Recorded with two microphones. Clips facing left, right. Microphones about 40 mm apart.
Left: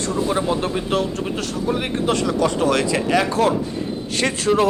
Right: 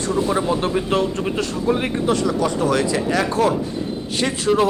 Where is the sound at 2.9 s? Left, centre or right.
Centre.